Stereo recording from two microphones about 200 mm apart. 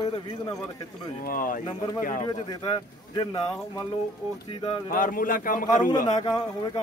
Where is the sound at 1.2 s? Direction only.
45° left (ahead or behind).